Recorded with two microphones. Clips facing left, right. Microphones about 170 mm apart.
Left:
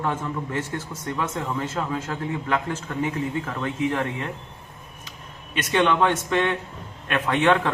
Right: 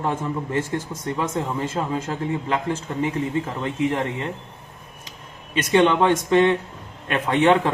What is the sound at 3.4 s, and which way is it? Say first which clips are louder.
Speech: right 2 dB; 20° right (ahead or behind).